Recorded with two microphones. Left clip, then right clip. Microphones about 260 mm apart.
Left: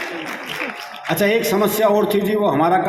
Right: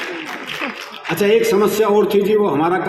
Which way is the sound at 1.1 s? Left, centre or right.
Left.